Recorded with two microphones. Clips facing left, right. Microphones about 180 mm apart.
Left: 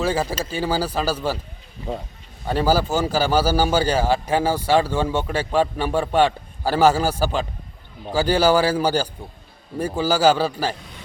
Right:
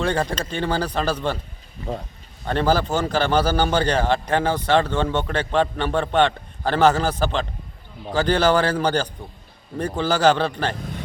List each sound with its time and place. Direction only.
0.0 s speech: 5° left (ahead or behind)
2.5 s a man's voice: 5° left (ahead or behind)